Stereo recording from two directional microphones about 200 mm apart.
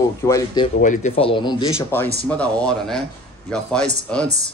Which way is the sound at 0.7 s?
40° left (ahead or behind).